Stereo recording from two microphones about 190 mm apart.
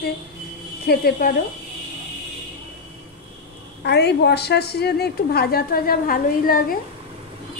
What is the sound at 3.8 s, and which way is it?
A woman's voice, 60° left (ahead or behind).